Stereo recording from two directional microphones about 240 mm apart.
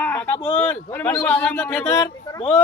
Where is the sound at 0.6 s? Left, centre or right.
Centre.